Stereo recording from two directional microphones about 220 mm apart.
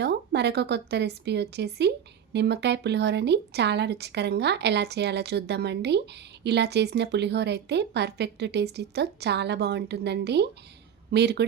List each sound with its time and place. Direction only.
0.0 s a woman's voice: 50° right (ahead or behind)